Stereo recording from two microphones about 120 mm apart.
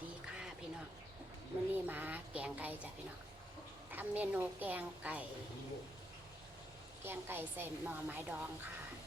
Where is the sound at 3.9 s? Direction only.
15° right (ahead or behind).